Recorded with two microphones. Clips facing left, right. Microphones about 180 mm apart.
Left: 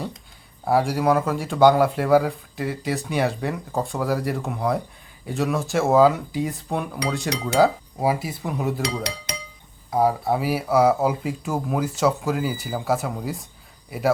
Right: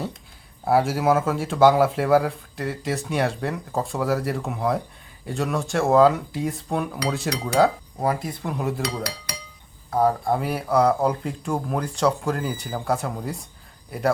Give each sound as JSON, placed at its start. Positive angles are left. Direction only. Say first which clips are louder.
{"t": 0.6, "sound": "speech", "louder": "even", "side_deg": 0}
{"t": 9.9, "sound": "speech", "louder": "even", "side_deg": 10}